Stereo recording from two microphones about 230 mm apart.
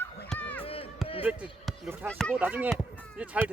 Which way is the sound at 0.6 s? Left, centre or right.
Left.